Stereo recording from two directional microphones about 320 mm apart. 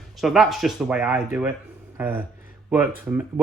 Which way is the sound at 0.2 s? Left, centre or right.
Centre.